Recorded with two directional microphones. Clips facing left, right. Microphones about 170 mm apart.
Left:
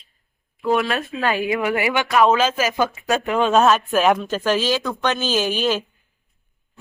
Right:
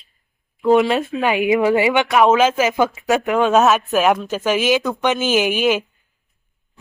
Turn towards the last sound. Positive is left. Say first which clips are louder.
# right 4 dB
turn(degrees=-15)  # may be behind; listen again after turning